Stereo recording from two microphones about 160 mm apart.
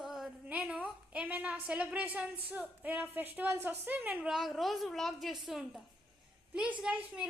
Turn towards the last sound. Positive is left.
turn(degrees=-5)  # may be behind; listen again after turning